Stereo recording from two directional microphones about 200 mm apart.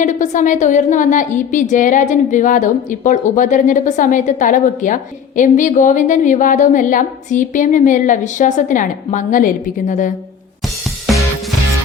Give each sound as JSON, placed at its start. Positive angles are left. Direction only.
{"t": 0.0, "sound": "a woman's voice", "side_deg": 35}